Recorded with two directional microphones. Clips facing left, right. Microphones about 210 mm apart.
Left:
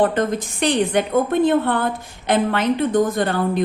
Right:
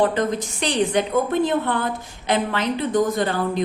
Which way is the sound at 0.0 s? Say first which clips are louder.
Left 2 dB; 50° left (ahead or behind).